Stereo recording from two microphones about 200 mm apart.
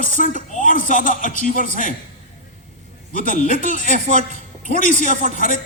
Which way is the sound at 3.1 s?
40° left (ahead or behind).